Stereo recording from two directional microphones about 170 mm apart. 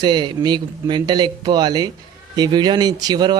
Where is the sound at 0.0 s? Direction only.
25° right (ahead or behind).